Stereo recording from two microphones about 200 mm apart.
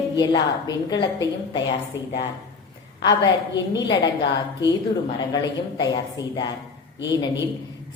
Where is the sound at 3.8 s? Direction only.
20° left (ahead or behind).